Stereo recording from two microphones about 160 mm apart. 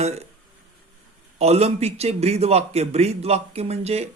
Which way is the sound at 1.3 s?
40° right (ahead or behind).